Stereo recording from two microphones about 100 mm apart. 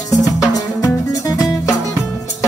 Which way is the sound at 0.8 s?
35° left (ahead or behind).